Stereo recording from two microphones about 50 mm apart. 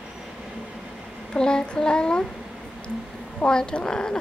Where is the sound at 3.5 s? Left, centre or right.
Centre.